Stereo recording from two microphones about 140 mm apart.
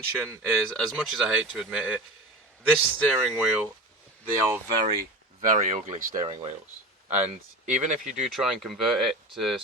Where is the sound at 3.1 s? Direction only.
5° left (ahead or behind).